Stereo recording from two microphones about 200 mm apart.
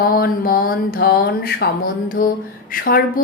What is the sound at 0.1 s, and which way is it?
A woman's voice, 50° left (ahead or behind).